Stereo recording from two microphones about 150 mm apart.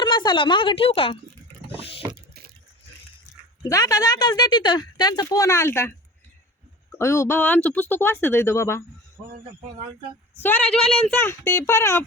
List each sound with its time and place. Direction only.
0.0 s speech: 30° left (ahead or behind)
3.6 s speech: 20° left (ahead or behind)
7.0 s speech: 20° left (ahead or behind)
10.4 s speech: 10° left (ahead or behind)